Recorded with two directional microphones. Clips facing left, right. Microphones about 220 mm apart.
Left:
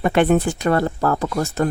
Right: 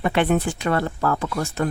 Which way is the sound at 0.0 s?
45° left (ahead or behind).